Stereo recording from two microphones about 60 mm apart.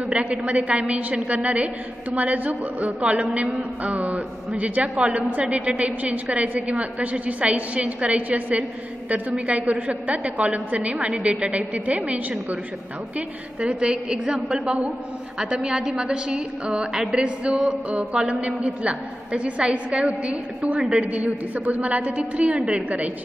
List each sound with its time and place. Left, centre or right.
0.0 s a woman's voice: right
13.6 s music: centre
17.8 s a woman's voice: right
21.0 s a woman's voice: right